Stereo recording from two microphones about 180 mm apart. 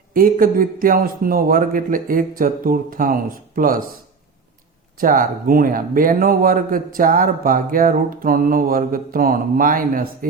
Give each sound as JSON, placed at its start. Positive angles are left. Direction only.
{"t": 0.1, "sound": "a man's voice", "side_deg": -50}
{"t": 4.9, "sound": "a man's voice", "side_deg": -50}